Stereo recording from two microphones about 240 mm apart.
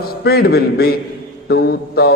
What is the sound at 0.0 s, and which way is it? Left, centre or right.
A man's voice, left.